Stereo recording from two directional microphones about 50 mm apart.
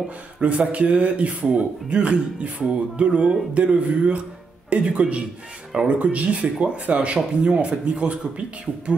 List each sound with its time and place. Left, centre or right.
0.4 s a man's voice: right